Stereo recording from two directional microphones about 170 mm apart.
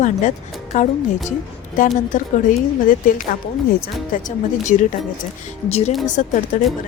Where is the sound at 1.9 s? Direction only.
50° left (ahead or behind).